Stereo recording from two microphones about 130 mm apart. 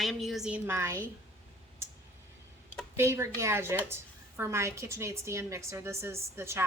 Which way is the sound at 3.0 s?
20° right (ahead or behind).